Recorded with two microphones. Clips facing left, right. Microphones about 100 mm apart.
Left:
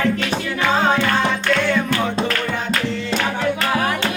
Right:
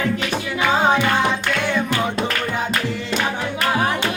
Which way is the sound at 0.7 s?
15° right (ahead or behind).